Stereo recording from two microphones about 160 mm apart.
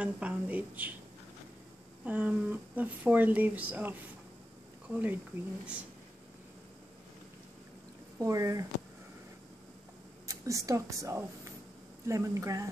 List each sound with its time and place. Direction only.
0.0 s speech: 10° right (ahead or behind)
2.0 s speech: 10° right (ahead or behind)
8.2 s speech: 20° right (ahead or behind)
10.2 s speech: 20° right (ahead or behind)